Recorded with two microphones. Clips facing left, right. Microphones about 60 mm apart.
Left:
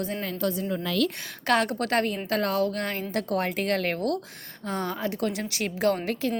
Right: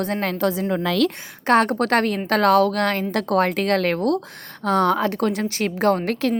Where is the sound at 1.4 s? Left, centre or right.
Right.